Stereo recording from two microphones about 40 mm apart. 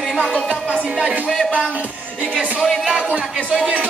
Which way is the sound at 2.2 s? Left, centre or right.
Right.